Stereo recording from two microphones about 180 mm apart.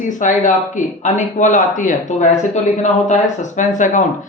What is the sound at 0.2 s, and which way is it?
Speech, 45° left (ahead or behind).